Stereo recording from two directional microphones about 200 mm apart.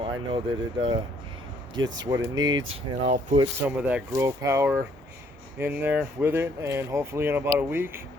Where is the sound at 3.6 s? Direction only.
5° right (ahead or behind).